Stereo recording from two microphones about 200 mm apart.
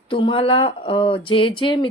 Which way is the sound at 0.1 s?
25° left (ahead or behind).